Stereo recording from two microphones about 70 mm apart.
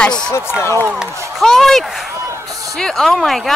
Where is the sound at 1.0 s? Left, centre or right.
Right.